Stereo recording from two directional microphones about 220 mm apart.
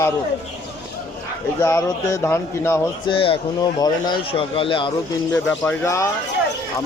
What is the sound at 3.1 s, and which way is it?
Speech, 25° left (ahead or behind).